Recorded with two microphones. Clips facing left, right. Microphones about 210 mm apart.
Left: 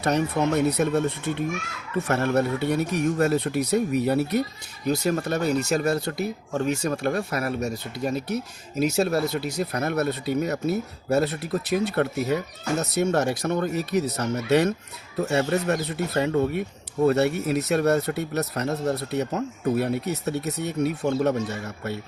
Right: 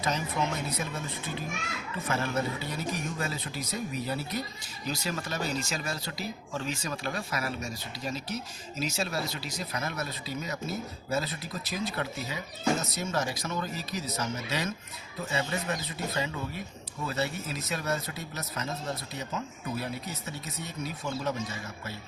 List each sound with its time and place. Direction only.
0.0 s speech: 65° left (ahead or behind)